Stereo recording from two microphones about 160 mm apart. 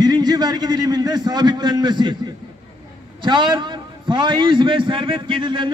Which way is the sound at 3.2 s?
30° right (ahead or behind).